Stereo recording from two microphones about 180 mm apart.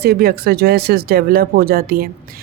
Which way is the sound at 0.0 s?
60° right (ahead or behind).